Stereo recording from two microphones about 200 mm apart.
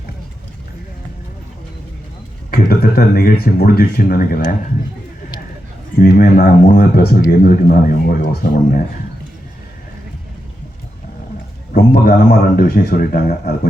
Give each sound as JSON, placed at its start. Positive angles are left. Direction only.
{"t": 2.5, "sound": "speech", "side_deg": 50}
{"t": 6.0, "sound": "speech", "side_deg": 50}
{"t": 11.7, "sound": "speech", "side_deg": 50}